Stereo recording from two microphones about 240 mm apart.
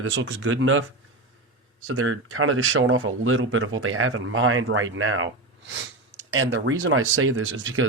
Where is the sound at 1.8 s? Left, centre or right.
Right.